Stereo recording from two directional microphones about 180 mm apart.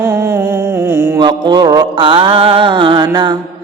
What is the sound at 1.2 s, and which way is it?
Mantra, 25° right (ahead or behind).